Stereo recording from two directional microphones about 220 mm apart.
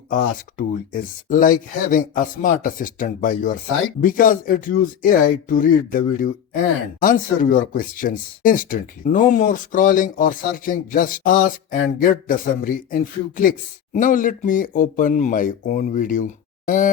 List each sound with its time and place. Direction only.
0.1 s a man's voice: 40° left (ahead or behind)